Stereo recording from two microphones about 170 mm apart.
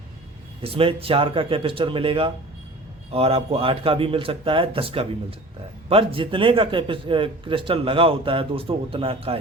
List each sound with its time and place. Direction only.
0.6 s a man's voice: 35° right (ahead or behind)